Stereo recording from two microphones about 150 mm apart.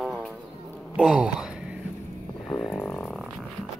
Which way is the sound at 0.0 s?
5° right (ahead or behind).